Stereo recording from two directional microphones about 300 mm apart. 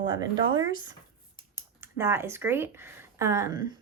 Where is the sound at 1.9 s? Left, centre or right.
Centre.